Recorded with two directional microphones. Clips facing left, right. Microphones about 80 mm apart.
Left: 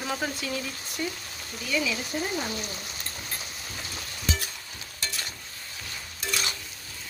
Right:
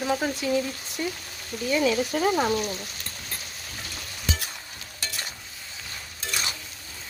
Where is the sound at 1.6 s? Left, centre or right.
Right.